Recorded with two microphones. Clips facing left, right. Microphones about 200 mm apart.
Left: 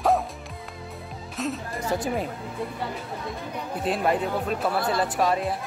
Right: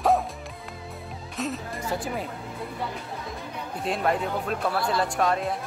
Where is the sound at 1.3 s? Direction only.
Centre (ahead or behind).